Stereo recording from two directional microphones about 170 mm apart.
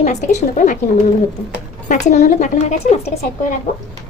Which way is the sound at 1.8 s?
50° left (ahead or behind).